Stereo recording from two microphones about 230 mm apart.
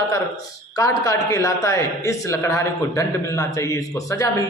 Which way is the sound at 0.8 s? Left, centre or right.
Centre.